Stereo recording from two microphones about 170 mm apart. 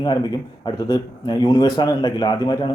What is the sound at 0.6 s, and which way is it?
A man's voice, 25° left (ahead or behind).